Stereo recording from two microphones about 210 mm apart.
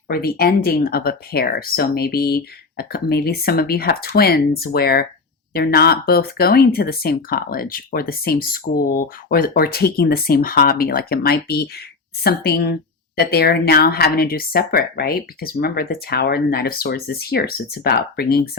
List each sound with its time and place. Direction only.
0.1 s speech: 45° left (ahead or behind)